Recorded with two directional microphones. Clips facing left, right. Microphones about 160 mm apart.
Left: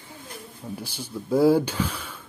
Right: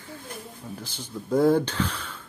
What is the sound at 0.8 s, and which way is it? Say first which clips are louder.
Speech: left 2 dB; 10° left (ahead or behind).